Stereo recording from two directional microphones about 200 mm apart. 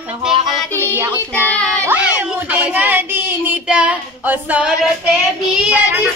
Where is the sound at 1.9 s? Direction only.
10° right (ahead or behind).